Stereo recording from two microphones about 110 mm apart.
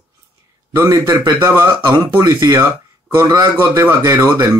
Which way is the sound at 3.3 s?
30° right (ahead or behind).